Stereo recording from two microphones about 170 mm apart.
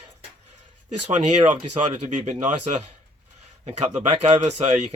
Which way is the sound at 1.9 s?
40° right (ahead or behind).